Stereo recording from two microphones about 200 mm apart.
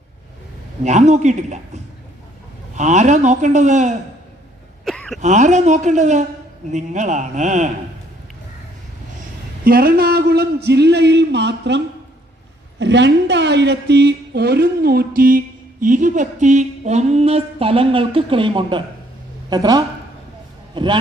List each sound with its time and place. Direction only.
0.9 s speech: 35° right (ahead or behind)
4.9 s a sound: 5° left (ahead or behind)
5.2 s speech: 35° right (ahead or behind)
9.6 s a man's voice: 50° right (ahead or behind)
12.8 s a woman's voice: 60° right (ahead or behind); by 21.0 s 25° right (ahead or behind)